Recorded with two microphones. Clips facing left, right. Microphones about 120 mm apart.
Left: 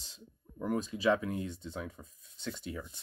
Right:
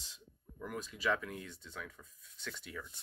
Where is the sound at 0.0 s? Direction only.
30° left (ahead or behind).